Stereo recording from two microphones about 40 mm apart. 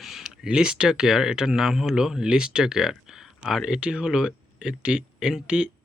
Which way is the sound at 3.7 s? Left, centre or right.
Right.